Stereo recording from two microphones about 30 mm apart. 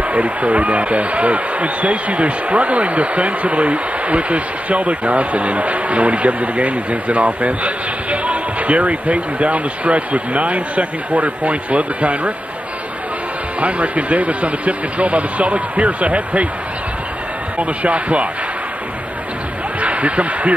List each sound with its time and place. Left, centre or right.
0.1 s speech: right
13.6 s speech: right
17.6 s speech: right
19.8 s speech: right